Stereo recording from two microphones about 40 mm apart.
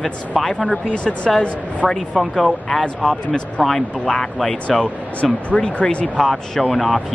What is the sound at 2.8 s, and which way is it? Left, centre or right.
Speech, centre.